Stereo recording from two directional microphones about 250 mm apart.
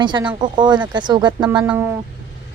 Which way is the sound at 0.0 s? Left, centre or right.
Centre.